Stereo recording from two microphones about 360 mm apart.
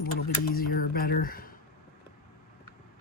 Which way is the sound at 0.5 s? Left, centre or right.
Left.